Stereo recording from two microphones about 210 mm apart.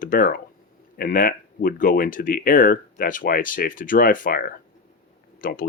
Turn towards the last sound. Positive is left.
turn(degrees=40)  # may be behind; listen again after turning